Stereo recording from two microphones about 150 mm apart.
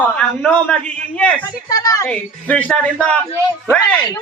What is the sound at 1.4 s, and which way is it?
Speech, 25° left (ahead or behind).